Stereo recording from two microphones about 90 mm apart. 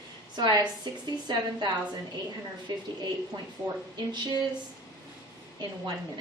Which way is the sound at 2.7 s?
55° right (ahead or behind).